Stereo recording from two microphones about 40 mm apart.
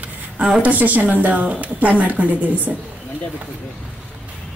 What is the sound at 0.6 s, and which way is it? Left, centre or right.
A woman's voice, right.